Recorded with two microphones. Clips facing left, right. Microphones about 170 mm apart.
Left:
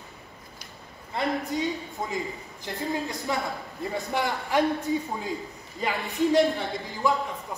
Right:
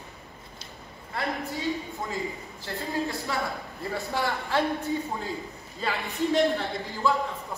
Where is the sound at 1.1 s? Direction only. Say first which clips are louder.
Left 4 dB; 20° left (ahead or behind).